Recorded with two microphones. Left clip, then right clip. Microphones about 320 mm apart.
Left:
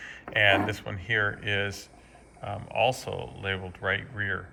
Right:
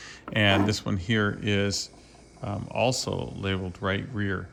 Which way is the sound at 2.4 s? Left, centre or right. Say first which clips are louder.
Right 1 dB; right.